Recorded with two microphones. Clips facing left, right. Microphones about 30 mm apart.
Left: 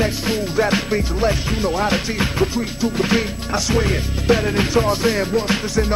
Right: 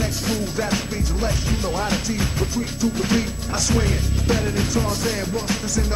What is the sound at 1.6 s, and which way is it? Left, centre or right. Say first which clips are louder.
Music: left 5 dB; centre.